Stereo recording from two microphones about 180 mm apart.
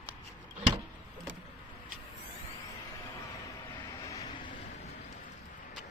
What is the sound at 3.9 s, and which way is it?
Vehicle, 20° left (ahead or behind).